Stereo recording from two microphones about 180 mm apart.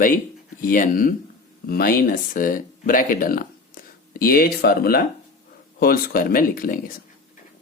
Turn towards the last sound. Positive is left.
turn(degrees=50)  # may be behind; listen again after turning